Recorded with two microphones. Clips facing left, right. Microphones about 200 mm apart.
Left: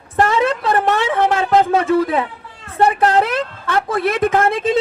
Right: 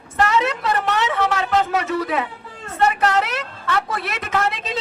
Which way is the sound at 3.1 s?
50° left (ahead or behind).